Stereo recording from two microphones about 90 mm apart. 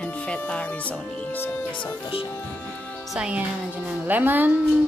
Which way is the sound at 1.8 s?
85° left.